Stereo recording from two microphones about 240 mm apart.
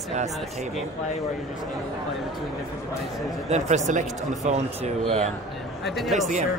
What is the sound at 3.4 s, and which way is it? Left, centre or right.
Speech, right.